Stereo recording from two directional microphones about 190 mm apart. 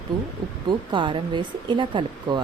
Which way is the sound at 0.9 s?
25° right (ahead or behind).